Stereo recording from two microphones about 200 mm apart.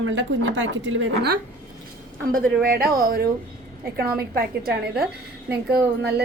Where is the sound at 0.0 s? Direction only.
70° right (ahead or behind).